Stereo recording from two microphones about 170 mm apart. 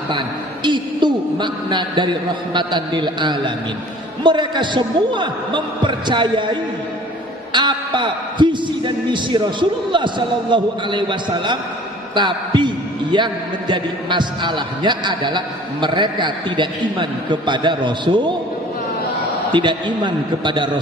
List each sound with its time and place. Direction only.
0.7 s a man's voice: 25° right (ahead or behind)
19.5 s a man's voice: 25° right (ahead or behind)